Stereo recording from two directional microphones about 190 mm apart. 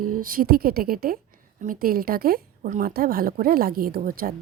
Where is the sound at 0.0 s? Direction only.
45° right (ahead or behind).